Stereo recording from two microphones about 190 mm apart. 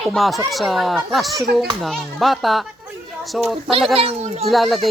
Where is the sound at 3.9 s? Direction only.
30° right (ahead or behind).